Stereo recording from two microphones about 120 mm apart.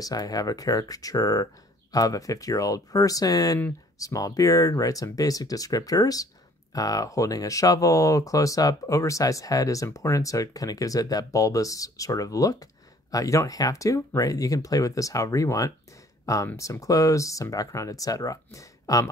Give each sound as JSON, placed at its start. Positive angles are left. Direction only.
{"t": 0.0, "sound": "speech", "side_deg": 30}